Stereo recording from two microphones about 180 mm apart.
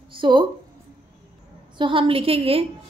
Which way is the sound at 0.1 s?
25° right (ahead or behind).